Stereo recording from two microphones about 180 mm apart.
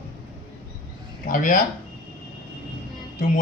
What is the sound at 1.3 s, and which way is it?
Speech, 50° left (ahead or behind).